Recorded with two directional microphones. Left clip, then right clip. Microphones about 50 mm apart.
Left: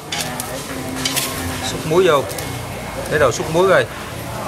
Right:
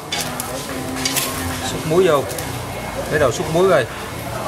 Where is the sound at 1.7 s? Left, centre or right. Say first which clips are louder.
Left 1 dB; centre.